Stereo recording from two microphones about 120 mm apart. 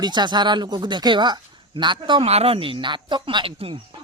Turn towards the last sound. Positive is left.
turn(degrees=-50)  # may be behind; listen again after turning